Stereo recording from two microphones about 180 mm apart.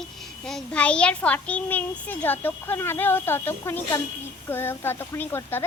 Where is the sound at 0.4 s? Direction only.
5° left (ahead or behind).